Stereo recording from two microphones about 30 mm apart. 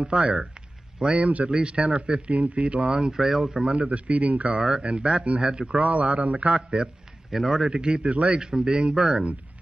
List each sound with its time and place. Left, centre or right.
0.1 s speech: right
1.1 s speech: right
1.5 s speech: right
2.3 s speech: right
3.1 s speech: centre
3.6 s speech: right
4.5 s a man's voice: right
4.8 s speech: right
5.8 s speech: right
6.5 s speech: right
7.2 s a man's voice: centre
7.6 s a man's voice: right
8.4 s a man's voice: right